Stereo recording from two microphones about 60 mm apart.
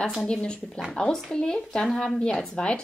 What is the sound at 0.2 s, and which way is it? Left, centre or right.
A woman's voice, centre.